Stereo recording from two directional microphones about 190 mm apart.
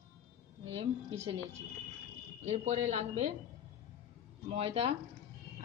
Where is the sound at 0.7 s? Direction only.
30° right (ahead or behind).